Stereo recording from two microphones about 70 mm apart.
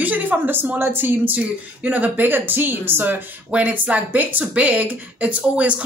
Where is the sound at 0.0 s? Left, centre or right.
Right.